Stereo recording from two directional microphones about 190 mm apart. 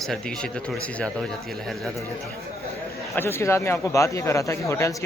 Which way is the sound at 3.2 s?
10° left (ahead or behind).